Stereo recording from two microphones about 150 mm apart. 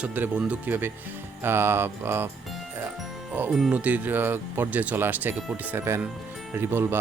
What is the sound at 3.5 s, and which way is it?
Speech, 5° right (ahead or behind).